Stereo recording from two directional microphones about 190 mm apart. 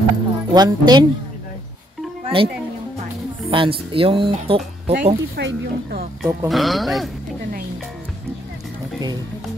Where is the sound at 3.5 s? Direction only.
25° right (ahead or behind).